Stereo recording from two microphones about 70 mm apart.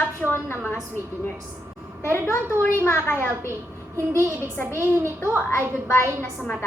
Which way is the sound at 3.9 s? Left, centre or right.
Right.